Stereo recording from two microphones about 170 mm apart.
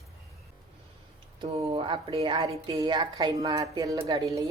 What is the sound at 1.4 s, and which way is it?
Speech, 35° right (ahead or behind).